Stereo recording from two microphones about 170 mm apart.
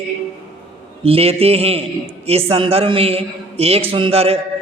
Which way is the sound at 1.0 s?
35° right (ahead or behind).